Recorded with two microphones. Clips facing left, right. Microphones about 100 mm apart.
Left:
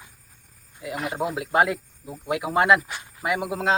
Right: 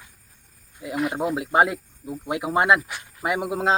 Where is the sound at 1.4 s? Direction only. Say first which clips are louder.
Right 1 dB; 25° right (ahead or behind).